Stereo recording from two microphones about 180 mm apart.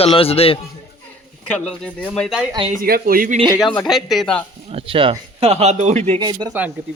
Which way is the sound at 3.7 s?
Centre (ahead or behind).